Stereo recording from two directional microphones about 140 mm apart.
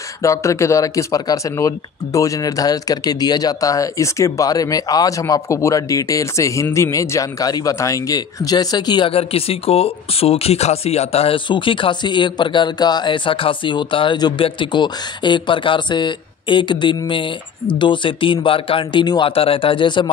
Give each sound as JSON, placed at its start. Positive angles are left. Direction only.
{"t": 0.2, "sound": "speech", "side_deg": 20}